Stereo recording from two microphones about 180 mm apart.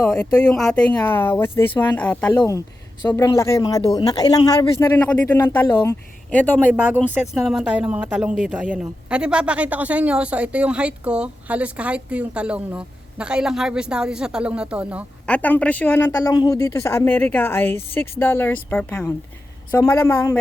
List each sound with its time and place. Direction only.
0.1 s a woman's voice: 5° left (ahead or behind)
6.7 s speech: 10° right (ahead or behind)
15.3 s a woman's voice: 10° left (ahead or behind)